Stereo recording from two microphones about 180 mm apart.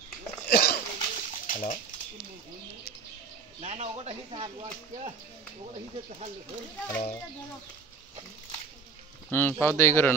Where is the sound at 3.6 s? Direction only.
35° right (ahead or behind).